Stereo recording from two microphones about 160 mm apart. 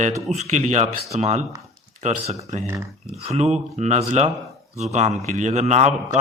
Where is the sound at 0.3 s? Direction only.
45° right (ahead or behind).